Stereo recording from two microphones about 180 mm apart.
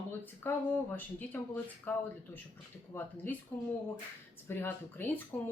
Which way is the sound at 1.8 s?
10° left (ahead or behind).